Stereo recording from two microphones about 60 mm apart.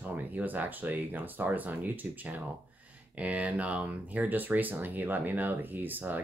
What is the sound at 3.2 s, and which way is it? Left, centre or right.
Speech, right.